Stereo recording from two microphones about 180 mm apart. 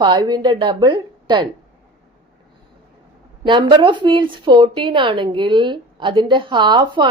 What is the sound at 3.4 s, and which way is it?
A woman's voice, 25° right (ahead or behind).